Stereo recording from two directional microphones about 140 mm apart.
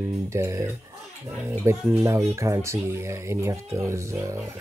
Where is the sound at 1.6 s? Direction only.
20° right (ahead or behind).